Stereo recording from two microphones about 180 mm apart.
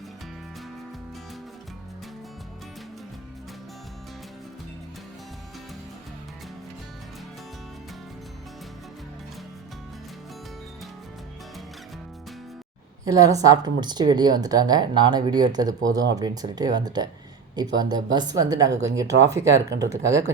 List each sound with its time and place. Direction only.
13.1 s speech: 20° right (ahead or behind)